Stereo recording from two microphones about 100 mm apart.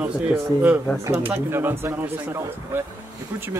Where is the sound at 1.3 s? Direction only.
20° right (ahead or behind).